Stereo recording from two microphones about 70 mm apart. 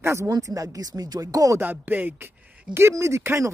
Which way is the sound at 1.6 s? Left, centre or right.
Right.